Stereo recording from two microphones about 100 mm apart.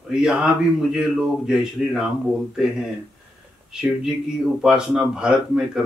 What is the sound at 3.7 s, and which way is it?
Speech, 5° right (ahead or behind).